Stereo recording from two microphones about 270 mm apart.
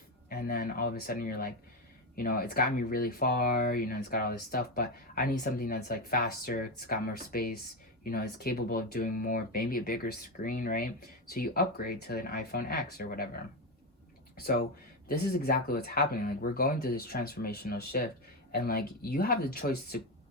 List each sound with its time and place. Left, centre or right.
0.3 s speech: left